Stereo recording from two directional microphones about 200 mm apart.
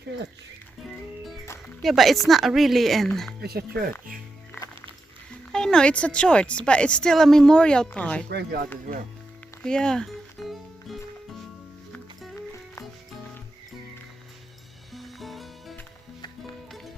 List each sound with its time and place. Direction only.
0.9 s music: centre (ahead or behind)
1.8 s a woman's voice: centre (ahead or behind)
3.4 s speech: 50° right (ahead or behind)
4.5 s music: 10° left (ahead or behind)
5.5 s a woman's voice: 5° left (ahead or behind)
8.3 s speech: 55° right (ahead or behind)
9.6 s music: 5° left (ahead or behind)
14.9 s music: centre (ahead or behind)